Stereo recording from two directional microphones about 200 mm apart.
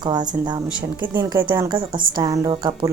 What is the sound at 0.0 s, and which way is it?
A woman's voice, 20° right (ahead or behind).